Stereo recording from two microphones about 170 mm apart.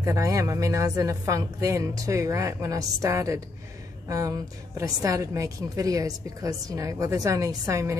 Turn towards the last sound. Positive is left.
turn(degrees=-20)  # may be behind; listen again after turning